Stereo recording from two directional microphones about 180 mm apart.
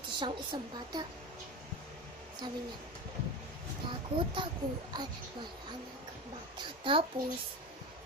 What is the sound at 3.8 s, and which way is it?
Speech, 25° right (ahead or behind).